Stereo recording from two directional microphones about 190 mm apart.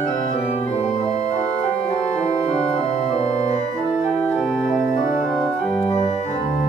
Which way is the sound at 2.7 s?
30° left (ahead or behind).